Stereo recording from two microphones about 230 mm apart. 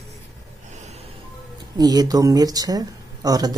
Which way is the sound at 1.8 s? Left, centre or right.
Centre.